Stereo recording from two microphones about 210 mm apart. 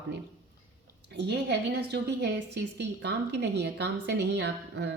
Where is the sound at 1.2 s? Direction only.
55° right (ahead or behind).